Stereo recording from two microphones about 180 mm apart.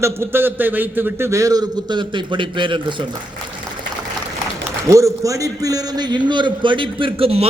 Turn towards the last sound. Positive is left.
turn(degrees=-30)  # may be behind; listen again after turning